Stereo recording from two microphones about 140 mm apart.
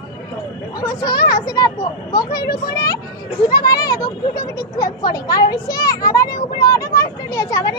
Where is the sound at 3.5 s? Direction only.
25° left (ahead or behind).